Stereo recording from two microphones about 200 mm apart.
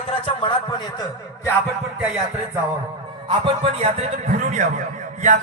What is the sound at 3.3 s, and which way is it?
A man's voice, 30° right (ahead or behind).